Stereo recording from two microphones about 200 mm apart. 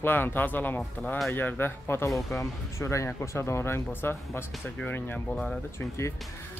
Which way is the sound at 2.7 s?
15° left (ahead or behind).